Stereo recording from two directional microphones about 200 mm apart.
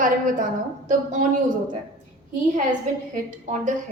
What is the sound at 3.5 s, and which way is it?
Speech, 40° right (ahead or behind).